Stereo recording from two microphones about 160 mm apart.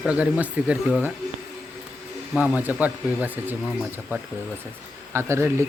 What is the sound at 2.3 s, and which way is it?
Speech, 10° right (ahead or behind).